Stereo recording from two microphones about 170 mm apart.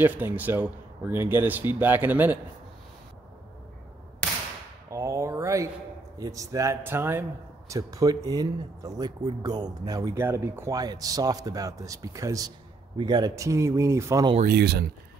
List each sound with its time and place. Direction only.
0.0 s speech: 10° right (ahead or behind)
4.9 s a sound: 15° right (ahead or behind)
6.1 s a man's voice: 20° right (ahead or behind)
14.4 s speech: 70° right (ahead or behind)